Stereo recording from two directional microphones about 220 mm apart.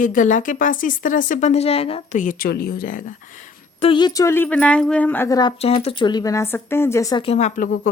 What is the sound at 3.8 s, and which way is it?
A woman's voice, 20° left (ahead or behind).